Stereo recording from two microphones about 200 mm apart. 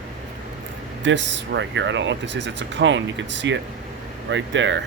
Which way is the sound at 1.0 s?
65° right (ahead or behind).